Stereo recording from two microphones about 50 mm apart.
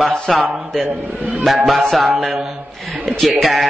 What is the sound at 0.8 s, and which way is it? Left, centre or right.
Speech, right.